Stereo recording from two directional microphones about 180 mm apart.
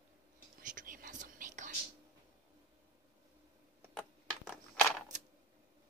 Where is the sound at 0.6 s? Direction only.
50° right (ahead or behind).